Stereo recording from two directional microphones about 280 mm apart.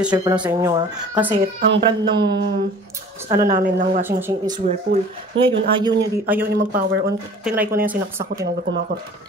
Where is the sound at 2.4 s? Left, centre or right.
Right.